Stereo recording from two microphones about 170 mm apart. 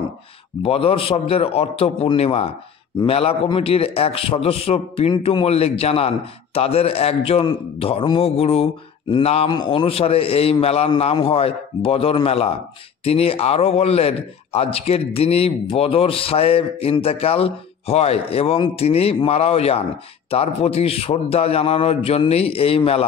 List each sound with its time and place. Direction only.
0.6 s a man's voice: 35° left (ahead or behind)